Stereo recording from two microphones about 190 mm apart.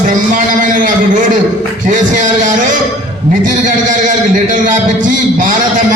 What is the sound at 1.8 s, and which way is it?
A man's voice, 45° right (ahead or behind).